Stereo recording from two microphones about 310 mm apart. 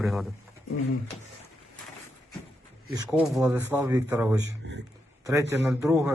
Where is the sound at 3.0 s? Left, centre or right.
Centre.